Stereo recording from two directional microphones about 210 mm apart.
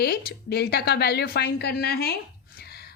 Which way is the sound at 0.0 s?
50° left (ahead or behind).